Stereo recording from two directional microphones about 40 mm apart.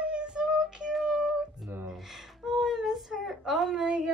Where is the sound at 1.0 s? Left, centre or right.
Centre.